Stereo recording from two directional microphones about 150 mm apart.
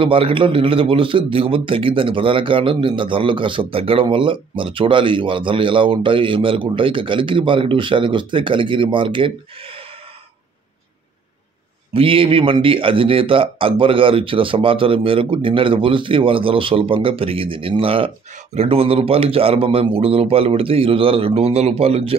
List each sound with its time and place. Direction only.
0.0 s a man's voice: 35° right (ahead or behind)
11.9 s a man's voice: 35° right (ahead or behind)